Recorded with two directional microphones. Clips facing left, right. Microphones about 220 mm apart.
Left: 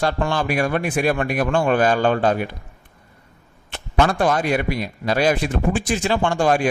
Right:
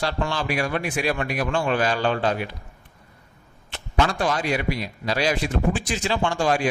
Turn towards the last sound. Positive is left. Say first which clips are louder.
# left 4 dB
turn(degrees=50)  # may be behind; listen again after turning